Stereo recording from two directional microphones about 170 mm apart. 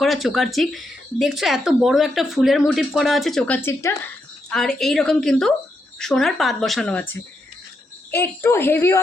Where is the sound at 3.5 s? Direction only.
15° left (ahead or behind).